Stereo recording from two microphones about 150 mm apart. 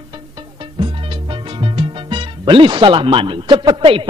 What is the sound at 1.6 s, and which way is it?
A man's voice, 35° right (ahead or behind).